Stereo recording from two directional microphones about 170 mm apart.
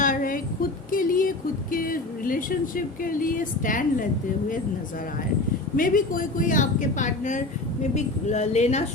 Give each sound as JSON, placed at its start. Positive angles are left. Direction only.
{"t": 0.0, "sound": "music", "side_deg": 50}
{"t": 0.9, "sound": "a sound", "side_deg": 55}
{"t": 1.7, "sound": "speech", "side_deg": 55}
{"t": 5.7, "sound": "a woman's voice", "side_deg": 55}